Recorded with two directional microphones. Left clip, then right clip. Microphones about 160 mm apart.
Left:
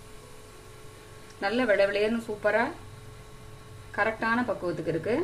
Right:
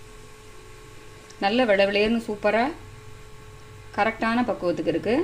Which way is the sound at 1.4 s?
45° right (ahead or behind).